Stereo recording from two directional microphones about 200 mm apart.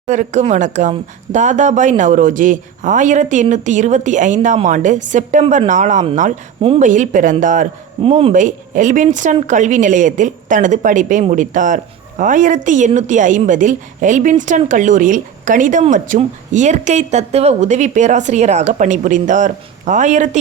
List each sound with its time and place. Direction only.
0.1 s a woman's voice: 35° right (ahead or behind)
6.6 s speech: 25° right (ahead or behind)
6.8 s a woman's voice: 40° right (ahead or behind)
8.0 s speech: 30° right (ahead or behind)
8.4 s a woman's voice: 40° right (ahead or behind)